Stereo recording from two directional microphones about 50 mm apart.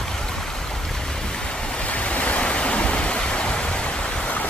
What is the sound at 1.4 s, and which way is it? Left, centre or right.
Waves, centre.